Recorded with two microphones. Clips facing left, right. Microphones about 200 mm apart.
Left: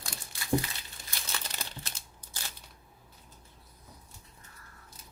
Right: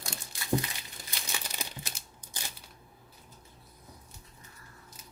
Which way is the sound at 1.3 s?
10° right (ahead or behind).